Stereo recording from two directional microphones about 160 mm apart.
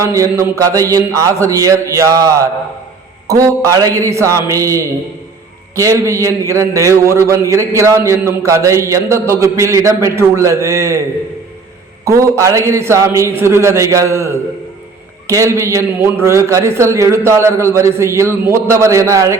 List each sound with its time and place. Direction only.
0.0 s a man's voice: 20° right (ahead or behind)
12.0 s a man's voice: 20° right (ahead or behind)